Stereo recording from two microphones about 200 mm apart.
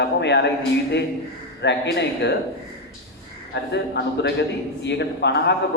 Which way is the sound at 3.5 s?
55° left (ahead or behind).